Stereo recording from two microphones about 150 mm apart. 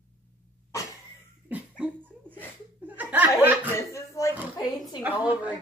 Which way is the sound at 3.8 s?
20° left (ahead or behind).